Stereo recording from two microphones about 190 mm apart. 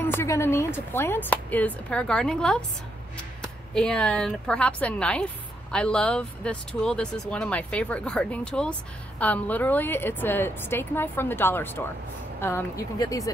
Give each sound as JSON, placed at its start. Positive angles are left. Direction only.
{"t": 0.0, "sound": "speech", "side_deg": 10}
{"t": 3.7, "sound": "a woman's voice", "side_deg": 5}